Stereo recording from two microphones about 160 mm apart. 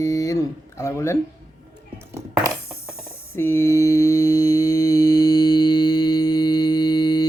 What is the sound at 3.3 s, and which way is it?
Mantra, 15° left (ahead or behind).